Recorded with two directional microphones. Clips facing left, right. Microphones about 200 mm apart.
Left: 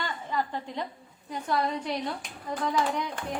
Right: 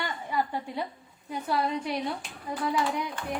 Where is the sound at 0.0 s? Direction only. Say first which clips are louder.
Right 1 dB; 10° right (ahead or behind).